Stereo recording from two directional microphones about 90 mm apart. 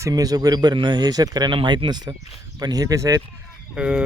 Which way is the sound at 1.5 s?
60° right (ahead or behind).